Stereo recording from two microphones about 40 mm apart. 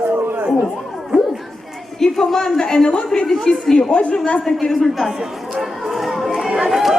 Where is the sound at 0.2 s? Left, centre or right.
Right.